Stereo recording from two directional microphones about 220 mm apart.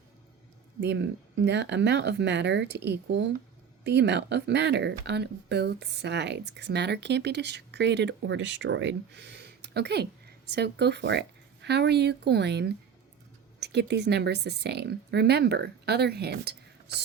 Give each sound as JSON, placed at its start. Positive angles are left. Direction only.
{"t": 0.8, "sound": "speech", "side_deg": -50}